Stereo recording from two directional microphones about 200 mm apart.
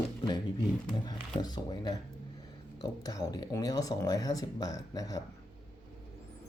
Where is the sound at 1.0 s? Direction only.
20° left (ahead or behind).